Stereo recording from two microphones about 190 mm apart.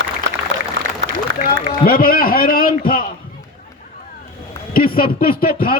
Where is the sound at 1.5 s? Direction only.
50° left (ahead or behind).